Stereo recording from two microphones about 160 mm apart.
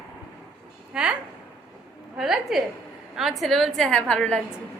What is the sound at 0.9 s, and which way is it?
Speech, 5° right (ahead or behind).